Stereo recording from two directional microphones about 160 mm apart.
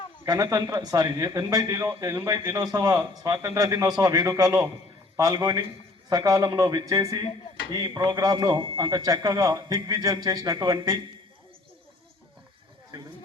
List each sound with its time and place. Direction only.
0.3 s a man's voice: 25° right (ahead or behind)